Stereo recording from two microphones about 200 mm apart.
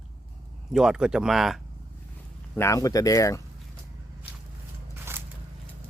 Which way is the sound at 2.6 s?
15° left (ahead or behind).